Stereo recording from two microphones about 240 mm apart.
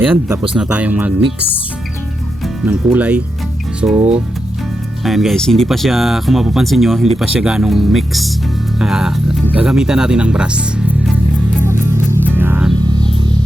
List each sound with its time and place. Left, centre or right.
0.0 s speech: centre
2.6 s speech: centre
5.0 s speech: centre
11.6 s music: centre